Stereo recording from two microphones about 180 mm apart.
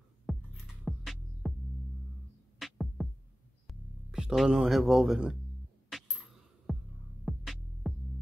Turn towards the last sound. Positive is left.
turn(degrees=0)  # may be behind; listen again after turning